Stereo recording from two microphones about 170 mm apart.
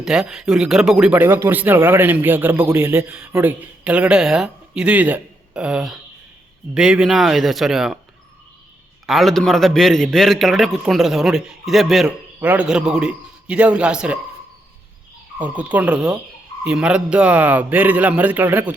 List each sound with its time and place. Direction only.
0.0 s a man's voice: 5° right (ahead or behind)
9.0 s a man's voice: centre (ahead or behind)
15.4 s speech: 10° right (ahead or behind)